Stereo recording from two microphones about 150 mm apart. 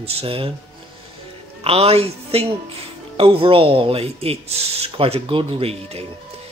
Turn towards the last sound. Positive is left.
turn(degrees=-40)  # may be behind; listen again after turning